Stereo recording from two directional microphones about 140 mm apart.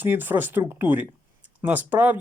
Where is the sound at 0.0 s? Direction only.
15° right (ahead or behind).